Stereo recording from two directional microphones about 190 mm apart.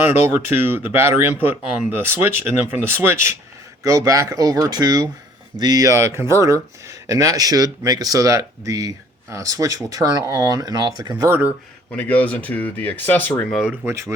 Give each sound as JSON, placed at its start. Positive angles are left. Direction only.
{"t": 0.0, "sound": "speech", "side_deg": -10}
{"t": 11.9, "sound": "speech", "side_deg": 10}
{"t": 13.8, "sound": "speech", "side_deg": -15}